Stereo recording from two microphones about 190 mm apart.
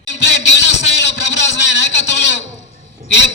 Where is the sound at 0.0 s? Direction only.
70° left (ahead or behind).